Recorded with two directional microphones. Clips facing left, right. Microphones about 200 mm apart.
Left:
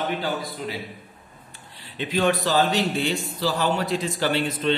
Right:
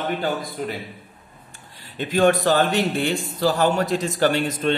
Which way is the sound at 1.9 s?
45° right (ahead or behind).